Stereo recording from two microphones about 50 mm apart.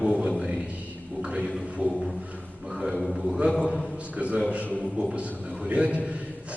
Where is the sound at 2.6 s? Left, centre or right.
Centre.